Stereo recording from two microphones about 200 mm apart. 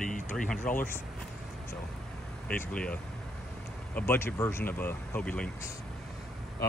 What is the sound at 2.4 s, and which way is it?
Speech, 5° left (ahead or behind).